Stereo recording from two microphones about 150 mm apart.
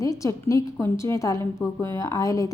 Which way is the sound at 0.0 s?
20° left (ahead or behind).